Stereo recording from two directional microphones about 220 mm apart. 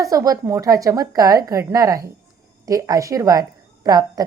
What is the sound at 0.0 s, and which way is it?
A woman's voice, 15° right (ahead or behind).